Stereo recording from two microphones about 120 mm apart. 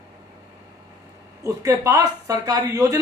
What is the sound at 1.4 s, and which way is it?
A man's voice, 25° right (ahead or behind).